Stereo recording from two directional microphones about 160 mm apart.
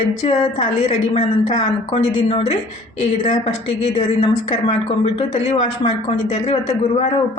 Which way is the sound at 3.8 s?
35° left (ahead or behind).